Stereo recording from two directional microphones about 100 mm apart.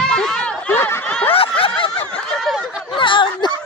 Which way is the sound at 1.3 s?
70° left (ahead or behind).